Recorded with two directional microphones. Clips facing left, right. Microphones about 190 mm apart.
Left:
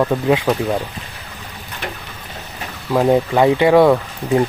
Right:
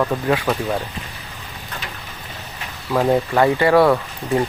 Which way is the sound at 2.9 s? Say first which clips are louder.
Left 3 dB; 15° left (ahead or behind).